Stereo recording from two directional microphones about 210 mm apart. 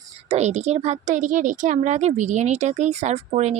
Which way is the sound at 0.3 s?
30° right (ahead or behind).